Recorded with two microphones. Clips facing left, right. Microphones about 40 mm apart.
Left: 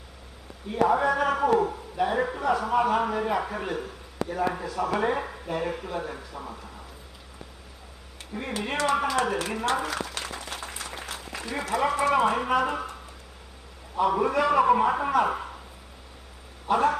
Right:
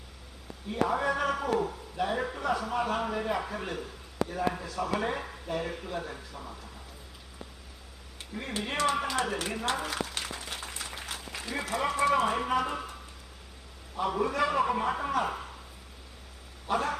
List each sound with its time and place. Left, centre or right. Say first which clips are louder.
0.7 s a man's voice: left 6 dB; centre
8.3 s a man's voice: left 3 dB; centre
9.8 s a sound: left 3 dB; centre
11.3 s a man's voice: left 5 dB; centre
13.9 s a man's voice: left 6 dB; centre
16.6 s a man's voice: left 7 dB; centre